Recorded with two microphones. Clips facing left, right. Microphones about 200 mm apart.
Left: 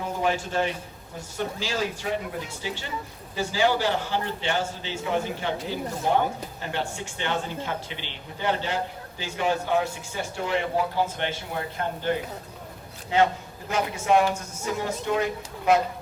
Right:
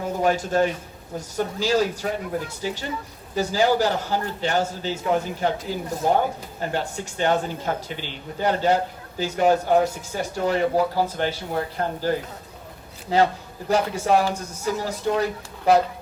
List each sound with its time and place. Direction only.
0.0 s a man's voice: 40° right (ahead or behind)